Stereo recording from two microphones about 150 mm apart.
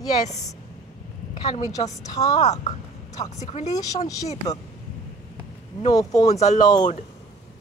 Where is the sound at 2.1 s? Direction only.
25° left (ahead or behind).